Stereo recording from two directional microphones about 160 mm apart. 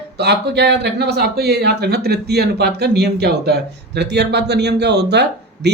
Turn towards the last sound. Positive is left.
turn(degrees=-90)